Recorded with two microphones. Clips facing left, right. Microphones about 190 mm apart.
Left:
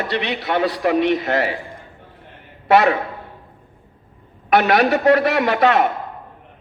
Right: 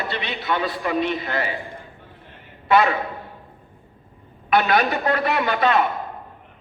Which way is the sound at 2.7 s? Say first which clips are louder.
Left 3 dB; 70° left (ahead or behind).